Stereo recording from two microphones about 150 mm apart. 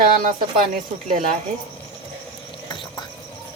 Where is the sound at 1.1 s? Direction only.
55° right (ahead or behind).